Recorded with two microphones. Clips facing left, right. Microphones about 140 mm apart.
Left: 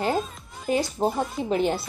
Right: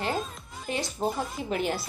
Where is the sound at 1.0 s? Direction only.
35° left (ahead or behind).